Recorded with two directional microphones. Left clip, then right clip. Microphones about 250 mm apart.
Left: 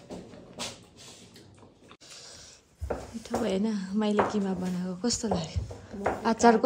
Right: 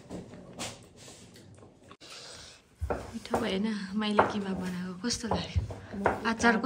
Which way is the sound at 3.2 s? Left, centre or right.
Centre.